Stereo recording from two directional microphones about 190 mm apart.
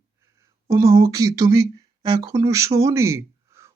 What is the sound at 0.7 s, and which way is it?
Speech, 15° right (ahead or behind).